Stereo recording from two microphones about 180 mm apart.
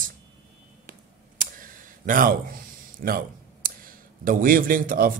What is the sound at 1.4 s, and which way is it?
Speech, 50° right (ahead or behind).